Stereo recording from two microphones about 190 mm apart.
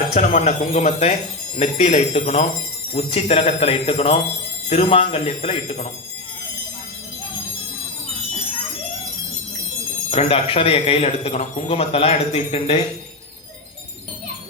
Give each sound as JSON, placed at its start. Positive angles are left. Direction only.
{"t": 0.1, "sound": "speech", "side_deg": 35}
{"t": 10.1, "sound": "speech", "side_deg": 30}